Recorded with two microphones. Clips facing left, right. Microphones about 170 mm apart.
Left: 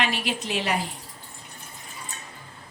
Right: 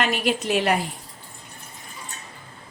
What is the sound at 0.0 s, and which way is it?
Speech, 45° right (ahead or behind).